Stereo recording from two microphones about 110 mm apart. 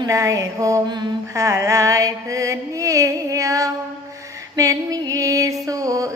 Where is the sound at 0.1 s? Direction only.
30° right (ahead or behind).